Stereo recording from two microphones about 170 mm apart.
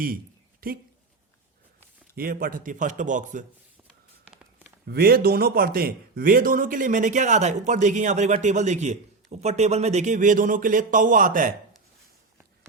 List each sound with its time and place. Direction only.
0.6 s speech: 60° right (ahead or behind)
2.1 s a man's voice: 60° right (ahead or behind)
4.9 s a man's voice: 65° right (ahead or behind)